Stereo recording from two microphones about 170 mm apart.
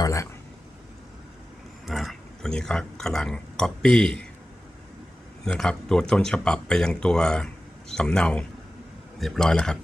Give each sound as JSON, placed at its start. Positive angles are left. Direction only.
{"t": 0.0, "sound": "speech", "side_deg": 20}
{"t": 1.9, "sound": "speech", "side_deg": 0}
{"t": 5.4, "sound": "speech", "side_deg": 5}